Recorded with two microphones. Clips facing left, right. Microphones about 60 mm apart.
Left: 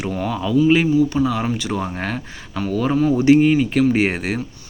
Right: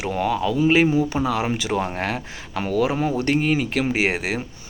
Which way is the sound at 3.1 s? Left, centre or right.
Centre.